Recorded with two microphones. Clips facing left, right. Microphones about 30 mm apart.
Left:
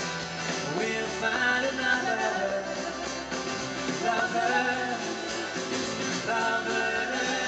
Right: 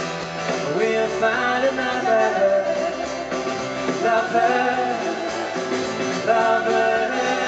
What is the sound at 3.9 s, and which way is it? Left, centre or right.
Music, centre.